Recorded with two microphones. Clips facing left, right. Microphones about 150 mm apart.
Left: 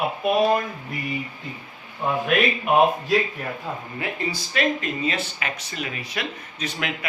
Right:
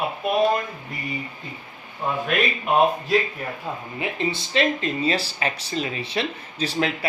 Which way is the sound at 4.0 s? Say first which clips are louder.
Right 4 dB; 25° right (ahead or behind).